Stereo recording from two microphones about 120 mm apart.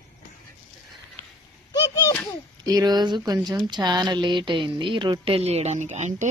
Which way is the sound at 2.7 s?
35° right (ahead or behind).